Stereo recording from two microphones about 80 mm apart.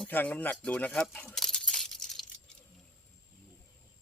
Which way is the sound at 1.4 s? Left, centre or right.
Centre.